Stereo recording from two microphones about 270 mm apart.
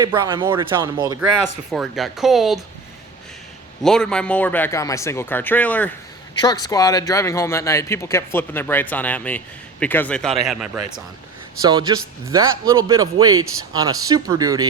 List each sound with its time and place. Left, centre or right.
0.0 s a man's voice: centre
1.1 s speech: centre
3.8 s speech: centre
11.6 s a man's voice: centre